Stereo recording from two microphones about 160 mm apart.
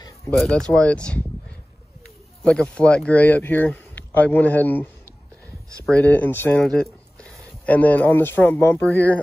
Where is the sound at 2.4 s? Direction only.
5° left (ahead or behind).